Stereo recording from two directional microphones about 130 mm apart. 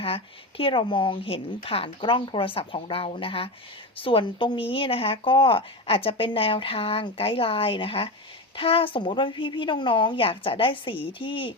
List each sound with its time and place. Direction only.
0.0 s a woman's voice: 45° left (ahead or behind)